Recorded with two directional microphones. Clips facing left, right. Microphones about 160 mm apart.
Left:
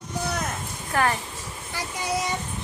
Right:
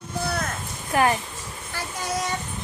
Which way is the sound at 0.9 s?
20° right (ahead or behind).